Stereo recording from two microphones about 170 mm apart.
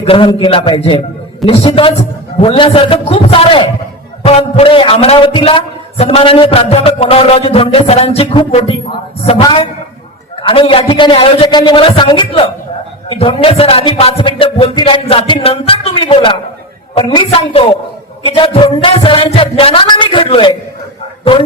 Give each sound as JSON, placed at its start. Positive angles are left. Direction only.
{"t": 0.0, "sound": "a man's voice", "side_deg": 30}